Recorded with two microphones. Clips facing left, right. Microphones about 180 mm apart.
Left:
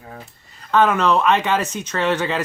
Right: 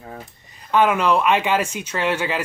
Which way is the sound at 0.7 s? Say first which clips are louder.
Left 1 dB; 10° right (ahead or behind).